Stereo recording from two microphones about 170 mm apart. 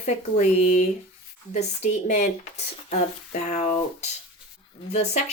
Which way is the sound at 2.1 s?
45° left (ahead or behind).